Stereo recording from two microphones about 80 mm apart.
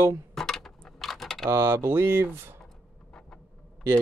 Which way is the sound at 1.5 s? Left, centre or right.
Right.